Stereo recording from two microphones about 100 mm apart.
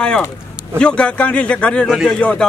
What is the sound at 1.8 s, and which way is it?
Speech, 5° right (ahead or behind).